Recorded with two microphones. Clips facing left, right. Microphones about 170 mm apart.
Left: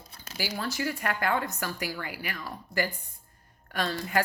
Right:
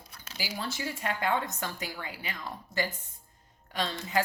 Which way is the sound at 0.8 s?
60° left (ahead or behind).